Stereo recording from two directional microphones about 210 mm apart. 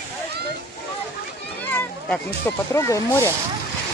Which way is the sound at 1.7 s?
10° left (ahead or behind).